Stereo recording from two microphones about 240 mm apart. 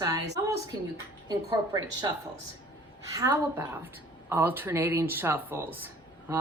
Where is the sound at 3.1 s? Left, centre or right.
Centre.